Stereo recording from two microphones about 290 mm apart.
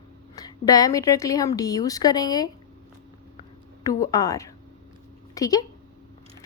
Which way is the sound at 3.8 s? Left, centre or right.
Centre.